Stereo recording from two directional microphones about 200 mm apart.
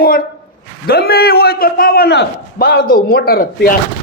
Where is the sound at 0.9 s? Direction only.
50° left (ahead or behind).